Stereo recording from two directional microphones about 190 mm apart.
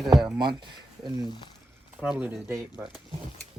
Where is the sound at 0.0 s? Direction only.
Centre (ahead or behind).